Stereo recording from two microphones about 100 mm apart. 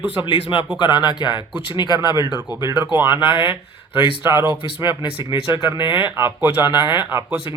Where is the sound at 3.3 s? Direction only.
60° left (ahead or behind).